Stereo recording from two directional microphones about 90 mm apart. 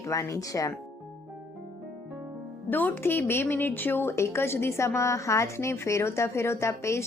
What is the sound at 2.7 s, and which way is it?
A woman's voice, 20° left (ahead or behind).